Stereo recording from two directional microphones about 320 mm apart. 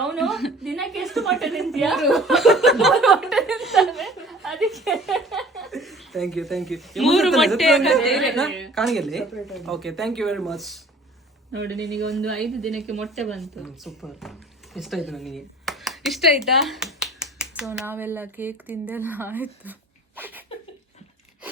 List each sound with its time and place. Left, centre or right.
0.0 s a woman's voice: centre
11.5 s speech: right
12.0 s a woman's voice: centre
20.1 s a sound: centre